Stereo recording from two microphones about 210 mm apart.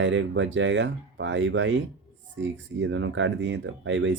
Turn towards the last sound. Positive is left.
turn(degrees=-60)  # may be behind; listen again after turning